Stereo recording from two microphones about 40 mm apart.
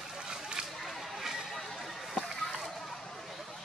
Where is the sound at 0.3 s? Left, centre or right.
Centre.